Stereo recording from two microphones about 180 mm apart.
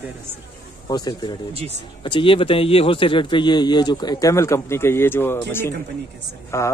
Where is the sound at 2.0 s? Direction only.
25° left (ahead or behind).